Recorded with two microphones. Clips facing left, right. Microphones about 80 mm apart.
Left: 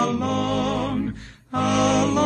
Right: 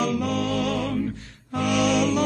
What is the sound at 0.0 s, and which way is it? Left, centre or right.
Music, left.